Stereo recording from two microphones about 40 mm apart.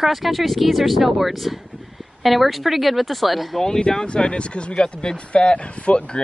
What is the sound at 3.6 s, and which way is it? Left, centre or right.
Speech, left.